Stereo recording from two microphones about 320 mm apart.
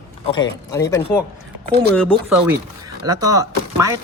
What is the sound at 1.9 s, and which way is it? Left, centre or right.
Speech, centre.